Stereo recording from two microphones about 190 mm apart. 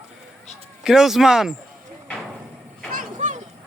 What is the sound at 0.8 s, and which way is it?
Speech, centre (ahead or behind).